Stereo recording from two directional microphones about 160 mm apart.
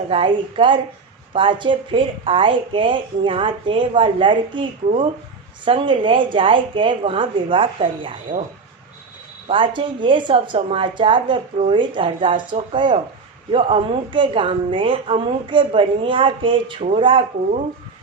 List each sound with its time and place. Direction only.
0.1 s speech: 35° right (ahead or behind)
9.5 s speech: 30° right (ahead or behind)